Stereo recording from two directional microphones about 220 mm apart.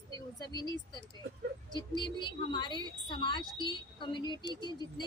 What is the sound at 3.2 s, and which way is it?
A woman's voice, 20° left (ahead or behind).